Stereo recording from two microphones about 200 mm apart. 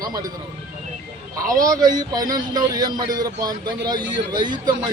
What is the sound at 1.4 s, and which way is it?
A man's voice, 15° right (ahead or behind).